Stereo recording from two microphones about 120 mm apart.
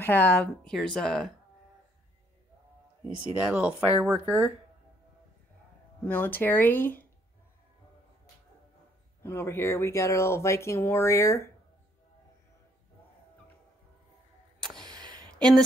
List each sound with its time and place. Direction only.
0.0 s speech: 15° left (ahead or behind)
0.7 s speech: 5° left (ahead or behind)
3.3 s speech: 10° right (ahead or behind)
6.0 s speech: 15° left (ahead or behind)
9.2 s speech: 20° left (ahead or behind)
14.6 s music: 5° left (ahead or behind)
14.9 s a sound: 35° right (ahead or behind)
15.3 s a sound: 5° left (ahead or behind)